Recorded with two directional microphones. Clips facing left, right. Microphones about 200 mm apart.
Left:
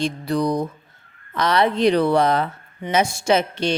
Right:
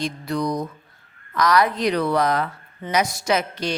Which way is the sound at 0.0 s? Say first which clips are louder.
Left 3 dB; 30° left (ahead or behind).